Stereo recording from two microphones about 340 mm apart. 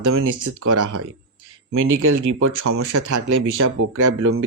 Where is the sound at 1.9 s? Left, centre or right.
Right.